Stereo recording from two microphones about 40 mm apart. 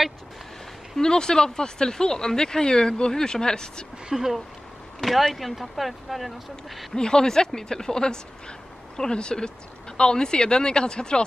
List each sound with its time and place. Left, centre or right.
0.9 s speech: centre
4.1 s speech: centre
5.0 s speech: centre
7.0 s speech: centre